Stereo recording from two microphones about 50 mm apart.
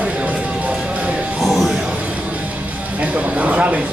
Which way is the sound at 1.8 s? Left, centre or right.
Right.